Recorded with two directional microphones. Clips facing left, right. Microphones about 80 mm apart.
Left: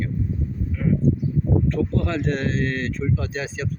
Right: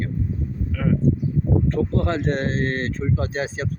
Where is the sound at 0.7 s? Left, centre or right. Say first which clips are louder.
Right 1 dB; right.